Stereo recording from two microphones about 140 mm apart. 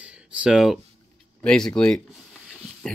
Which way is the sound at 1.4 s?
5° left (ahead or behind).